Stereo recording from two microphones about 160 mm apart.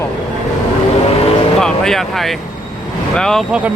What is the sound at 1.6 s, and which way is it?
A man's voice, 5° left (ahead or behind).